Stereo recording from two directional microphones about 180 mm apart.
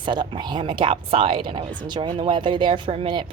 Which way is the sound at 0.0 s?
25° right (ahead or behind).